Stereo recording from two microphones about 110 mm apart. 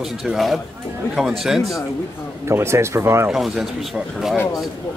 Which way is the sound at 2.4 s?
25° right (ahead or behind).